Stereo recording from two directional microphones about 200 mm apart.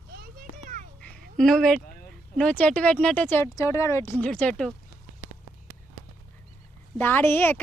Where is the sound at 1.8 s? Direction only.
45° left (ahead or behind).